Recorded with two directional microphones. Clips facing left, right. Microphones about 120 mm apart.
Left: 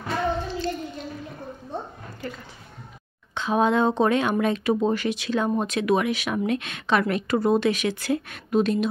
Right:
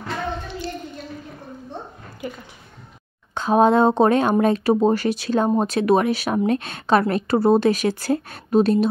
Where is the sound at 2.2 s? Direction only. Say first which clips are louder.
Right 3 dB; 15° right (ahead or behind).